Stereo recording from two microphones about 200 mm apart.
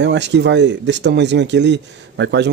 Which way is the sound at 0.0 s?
60° right (ahead or behind).